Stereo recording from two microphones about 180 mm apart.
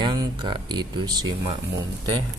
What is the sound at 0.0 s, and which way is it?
Speech, 25° right (ahead or behind).